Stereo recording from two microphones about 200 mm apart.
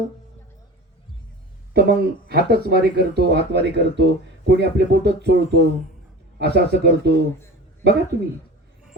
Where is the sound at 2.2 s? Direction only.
50° right (ahead or behind).